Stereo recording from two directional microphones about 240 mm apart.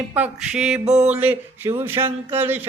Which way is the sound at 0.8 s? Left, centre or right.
Right.